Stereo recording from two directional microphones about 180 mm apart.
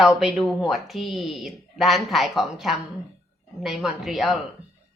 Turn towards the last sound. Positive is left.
turn(degrees=0)  # may be behind; listen again after turning